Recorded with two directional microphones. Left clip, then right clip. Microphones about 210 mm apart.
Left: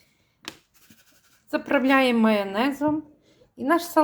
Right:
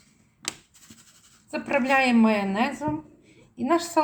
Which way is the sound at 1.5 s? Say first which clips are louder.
Left 2 dB; 45° left (ahead or behind).